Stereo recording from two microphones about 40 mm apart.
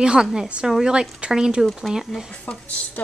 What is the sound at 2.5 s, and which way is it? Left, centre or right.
Speech, left.